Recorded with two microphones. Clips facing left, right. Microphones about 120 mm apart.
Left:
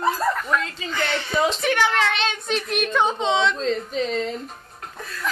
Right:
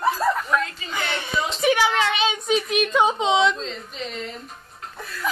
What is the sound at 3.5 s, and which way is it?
Speech, 45° left (ahead or behind).